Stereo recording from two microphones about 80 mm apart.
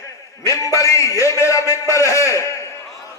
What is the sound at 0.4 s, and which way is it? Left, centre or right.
A man's voice, left.